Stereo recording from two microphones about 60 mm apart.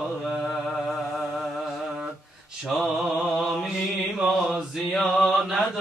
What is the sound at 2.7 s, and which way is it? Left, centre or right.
Mantra, centre.